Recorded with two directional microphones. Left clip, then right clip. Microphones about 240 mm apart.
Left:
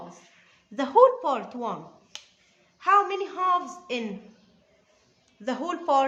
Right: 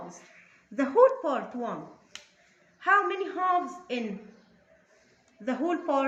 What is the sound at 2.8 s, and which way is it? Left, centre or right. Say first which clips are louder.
Speech: left 3 dB; left.